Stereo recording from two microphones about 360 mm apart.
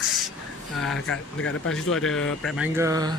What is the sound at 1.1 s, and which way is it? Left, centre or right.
Speech, left.